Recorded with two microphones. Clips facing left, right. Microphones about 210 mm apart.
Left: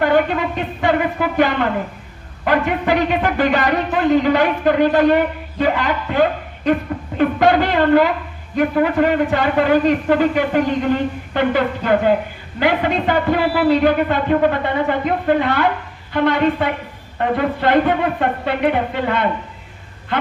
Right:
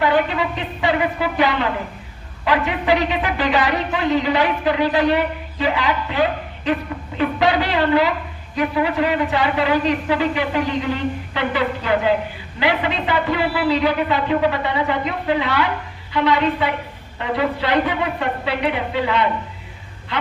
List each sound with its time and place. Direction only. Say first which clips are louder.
0.0 s speech: left 2 dB; 50° left (ahead or behind)